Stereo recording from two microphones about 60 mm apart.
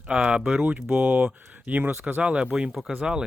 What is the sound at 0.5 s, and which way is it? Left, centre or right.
Speech, right.